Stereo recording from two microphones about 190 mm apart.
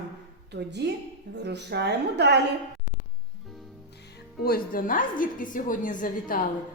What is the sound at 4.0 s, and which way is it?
A woman's voice, 55° left (ahead or behind).